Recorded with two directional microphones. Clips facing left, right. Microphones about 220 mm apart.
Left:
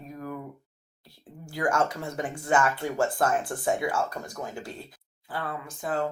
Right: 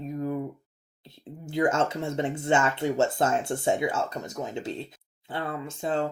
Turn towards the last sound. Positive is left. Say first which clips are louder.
# right 2 dB
turn(degrees=-25)  # may be behind; listen again after turning